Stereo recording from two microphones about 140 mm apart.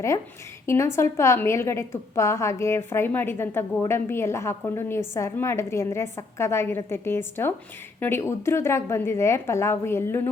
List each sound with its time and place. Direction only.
0.7 s a woman's voice: 20° left (ahead or behind)